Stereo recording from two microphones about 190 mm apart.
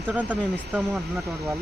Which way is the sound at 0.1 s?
10° right (ahead or behind).